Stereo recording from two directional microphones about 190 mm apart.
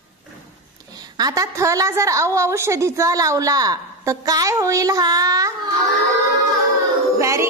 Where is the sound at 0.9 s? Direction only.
20° right (ahead or behind).